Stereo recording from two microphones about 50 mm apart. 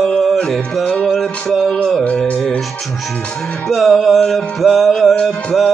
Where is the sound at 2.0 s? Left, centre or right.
Left.